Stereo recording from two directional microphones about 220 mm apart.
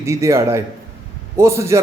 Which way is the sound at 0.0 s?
15° right (ahead or behind).